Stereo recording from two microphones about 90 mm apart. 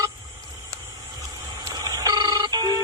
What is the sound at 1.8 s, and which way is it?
Telephone, 45° right (ahead or behind).